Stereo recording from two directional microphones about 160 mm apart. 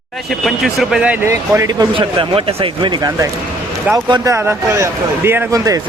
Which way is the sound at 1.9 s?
35° right (ahead or behind).